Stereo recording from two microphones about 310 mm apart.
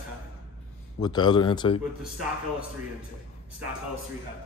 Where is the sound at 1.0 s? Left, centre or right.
Centre.